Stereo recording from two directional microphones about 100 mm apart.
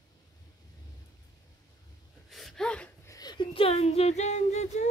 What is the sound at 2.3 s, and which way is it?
Gasp, centre (ahead or behind).